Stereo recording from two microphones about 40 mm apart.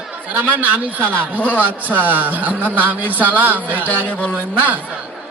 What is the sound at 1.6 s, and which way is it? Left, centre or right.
A man's voice, right.